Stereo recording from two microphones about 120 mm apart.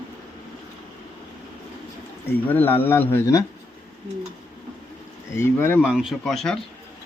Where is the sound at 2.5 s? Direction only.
15° left (ahead or behind).